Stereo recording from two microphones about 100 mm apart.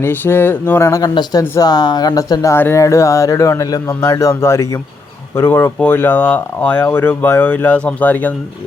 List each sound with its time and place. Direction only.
0.0 s speech: 20° left (ahead or behind)